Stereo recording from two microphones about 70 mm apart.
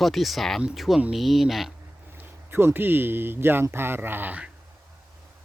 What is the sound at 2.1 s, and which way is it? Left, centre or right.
Speech, right.